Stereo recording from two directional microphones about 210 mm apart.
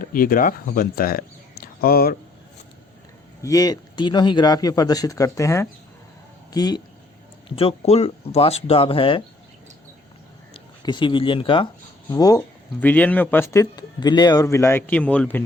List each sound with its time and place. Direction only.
0.0 s speech: 45° left (ahead or behind)
1.6 s a sound: 45° left (ahead or behind)
3.4 s speech: 15° left (ahead or behind)
10.5 s speech: 20° left (ahead or behind); by 15.4 s 5° left (ahead or behind)